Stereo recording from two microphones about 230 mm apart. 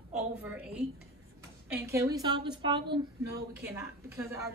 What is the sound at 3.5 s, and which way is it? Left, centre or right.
Speech, centre.